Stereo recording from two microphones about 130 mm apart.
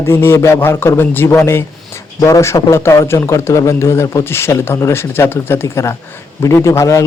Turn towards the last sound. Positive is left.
turn(degrees=25)  # may be behind; listen again after turning